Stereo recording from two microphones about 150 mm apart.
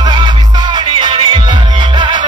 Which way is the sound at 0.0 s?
30° right (ahead or behind).